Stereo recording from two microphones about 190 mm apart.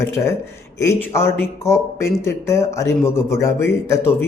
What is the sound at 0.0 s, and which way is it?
Speech, 15° left (ahead or behind).